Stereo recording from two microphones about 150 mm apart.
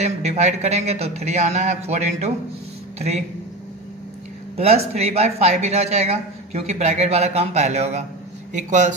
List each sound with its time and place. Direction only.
0.0 s speech: 45° right (ahead or behind)
4.6 s speech: 45° right (ahead or behind)